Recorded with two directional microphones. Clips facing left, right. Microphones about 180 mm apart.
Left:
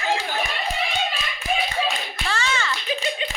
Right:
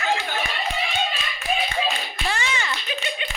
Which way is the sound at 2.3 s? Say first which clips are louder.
Left 3 dB; 15° right (ahead or behind).